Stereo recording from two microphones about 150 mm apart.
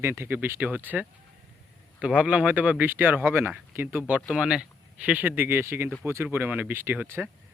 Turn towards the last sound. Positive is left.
turn(degrees=-15)  # may be behind; listen again after turning